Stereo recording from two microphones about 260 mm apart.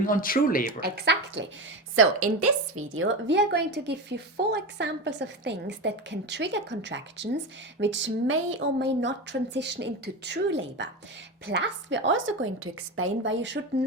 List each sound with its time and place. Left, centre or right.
0.0 s speech: left
0.7 s speech: right
2.0 s a woman's voice: right